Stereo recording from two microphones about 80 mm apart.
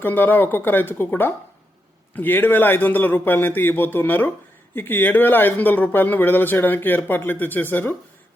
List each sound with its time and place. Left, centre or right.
0.0 s a man's voice: left